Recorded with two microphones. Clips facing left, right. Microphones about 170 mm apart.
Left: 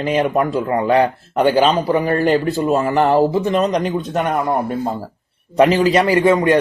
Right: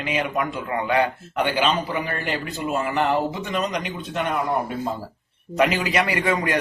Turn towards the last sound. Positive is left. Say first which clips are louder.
# left 9 dB
turn(degrees=25)  # may be behind; listen again after turning